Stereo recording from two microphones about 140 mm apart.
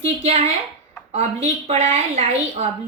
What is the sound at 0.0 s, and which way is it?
A woman's voice, 50° right (ahead or behind).